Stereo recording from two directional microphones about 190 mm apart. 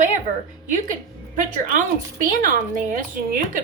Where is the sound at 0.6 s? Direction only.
40° right (ahead or behind).